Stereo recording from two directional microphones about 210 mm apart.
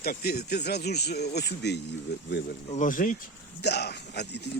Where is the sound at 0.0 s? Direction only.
45° left (ahead or behind).